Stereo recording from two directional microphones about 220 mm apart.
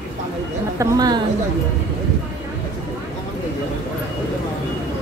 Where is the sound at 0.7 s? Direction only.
15° right (ahead or behind).